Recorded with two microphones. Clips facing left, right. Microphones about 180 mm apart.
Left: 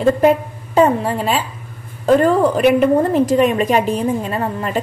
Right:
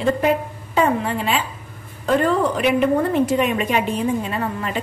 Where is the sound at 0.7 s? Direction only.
40° left (ahead or behind).